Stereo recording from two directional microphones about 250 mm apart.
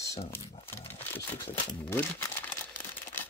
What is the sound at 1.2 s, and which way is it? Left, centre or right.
Speech, centre.